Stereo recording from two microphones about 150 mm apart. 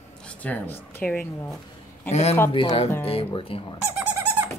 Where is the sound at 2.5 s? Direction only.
35° left (ahead or behind).